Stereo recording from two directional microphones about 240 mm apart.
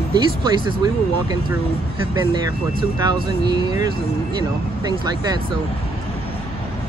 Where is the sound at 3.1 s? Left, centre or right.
Centre.